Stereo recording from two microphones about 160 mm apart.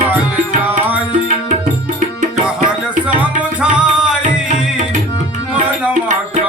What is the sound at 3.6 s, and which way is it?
Music, 5° right (ahead or behind).